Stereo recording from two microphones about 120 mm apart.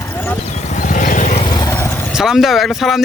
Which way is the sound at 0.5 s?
85° left.